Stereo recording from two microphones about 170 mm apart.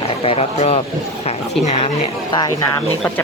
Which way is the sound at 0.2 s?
35° left (ahead or behind).